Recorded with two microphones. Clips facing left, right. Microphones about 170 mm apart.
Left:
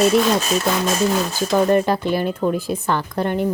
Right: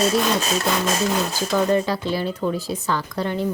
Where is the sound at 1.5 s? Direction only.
55° left (ahead or behind).